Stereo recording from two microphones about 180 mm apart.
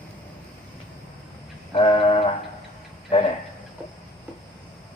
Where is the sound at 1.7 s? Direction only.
30° left (ahead or behind).